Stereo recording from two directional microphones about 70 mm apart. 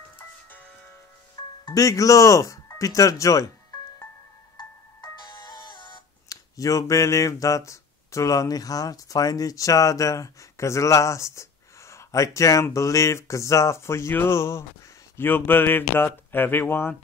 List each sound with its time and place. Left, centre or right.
1.7 s speech: left
4.6 s music: left
12.7 s speech: left
15.1 s speech: left